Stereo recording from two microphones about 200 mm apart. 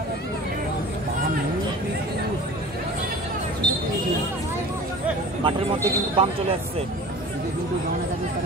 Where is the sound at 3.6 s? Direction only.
20° right (ahead or behind).